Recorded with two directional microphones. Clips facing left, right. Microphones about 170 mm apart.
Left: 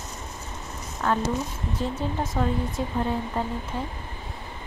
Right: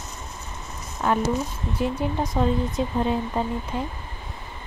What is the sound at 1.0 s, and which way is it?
Speech, 15° right (ahead or behind).